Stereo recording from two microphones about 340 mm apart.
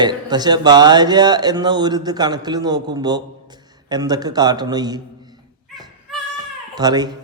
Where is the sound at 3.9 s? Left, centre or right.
Centre.